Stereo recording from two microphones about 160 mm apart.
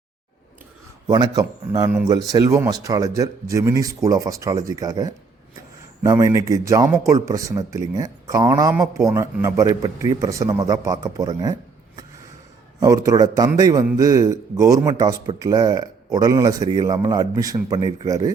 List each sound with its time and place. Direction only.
1.0 s speech: 25° right (ahead or behind)
12.8 s speech: 20° right (ahead or behind)